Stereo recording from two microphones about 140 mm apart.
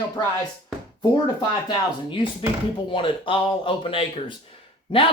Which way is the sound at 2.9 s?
40° left (ahead or behind).